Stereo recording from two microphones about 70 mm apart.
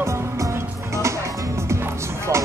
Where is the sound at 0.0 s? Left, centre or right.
Right.